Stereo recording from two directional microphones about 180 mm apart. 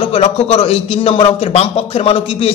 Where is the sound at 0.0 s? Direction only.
35° left (ahead or behind).